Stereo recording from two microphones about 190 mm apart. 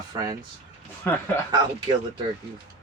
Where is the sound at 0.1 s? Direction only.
20° right (ahead or behind).